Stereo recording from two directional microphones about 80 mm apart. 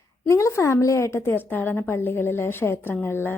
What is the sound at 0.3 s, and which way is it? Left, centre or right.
Speech, left.